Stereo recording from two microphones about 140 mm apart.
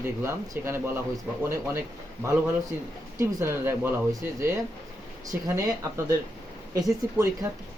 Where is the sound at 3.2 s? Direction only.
20° right (ahead or behind).